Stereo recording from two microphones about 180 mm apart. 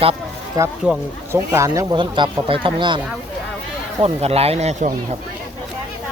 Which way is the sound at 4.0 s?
35° right (ahead or behind).